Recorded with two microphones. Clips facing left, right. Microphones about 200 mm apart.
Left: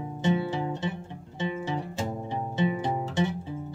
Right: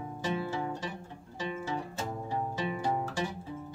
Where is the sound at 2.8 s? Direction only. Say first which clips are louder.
Left 4 dB; 20° left (ahead or behind).